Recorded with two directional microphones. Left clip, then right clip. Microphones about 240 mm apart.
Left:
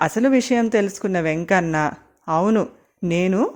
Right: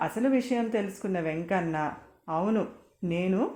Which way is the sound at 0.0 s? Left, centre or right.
Left.